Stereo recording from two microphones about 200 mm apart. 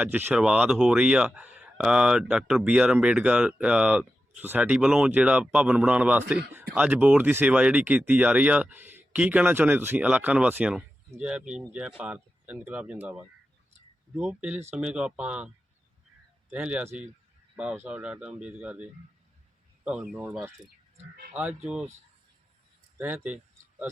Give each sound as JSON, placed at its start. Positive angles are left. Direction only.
{"t": 0.0, "sound": "speech", "side_deg": -10}
{"t": 16.5, "sound": "speech", "side_deg": -5}
{"t": 23.0, "sound": "speech", "side_deg": -10}